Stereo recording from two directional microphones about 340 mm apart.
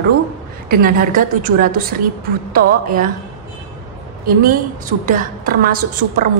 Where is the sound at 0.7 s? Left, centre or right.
Right.